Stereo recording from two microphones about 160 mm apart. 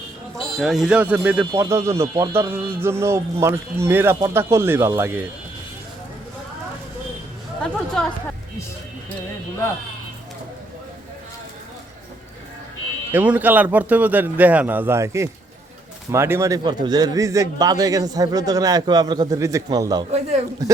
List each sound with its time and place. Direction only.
0.3 s speech: centre (ahead or behind)
7.6 s speech: 5° left (ahead or behind)
13.1 s speech: 10° right (ahead or behind)